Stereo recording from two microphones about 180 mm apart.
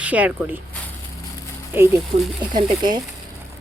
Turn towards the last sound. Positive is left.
turn(degrees=-25)  # may be behind; listen again after turning